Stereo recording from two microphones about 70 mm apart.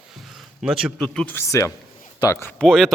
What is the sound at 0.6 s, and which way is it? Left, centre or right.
Speech, centre.